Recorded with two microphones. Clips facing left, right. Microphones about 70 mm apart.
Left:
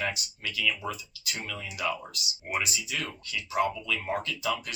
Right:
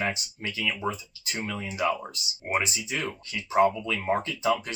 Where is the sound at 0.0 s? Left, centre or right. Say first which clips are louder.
Right 3 dB; right.